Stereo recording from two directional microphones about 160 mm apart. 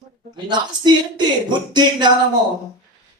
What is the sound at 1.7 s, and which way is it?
Speech, 30° right (ahead or behind).